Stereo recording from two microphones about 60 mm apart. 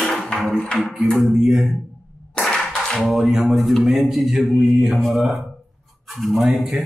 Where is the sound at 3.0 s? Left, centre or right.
Centre.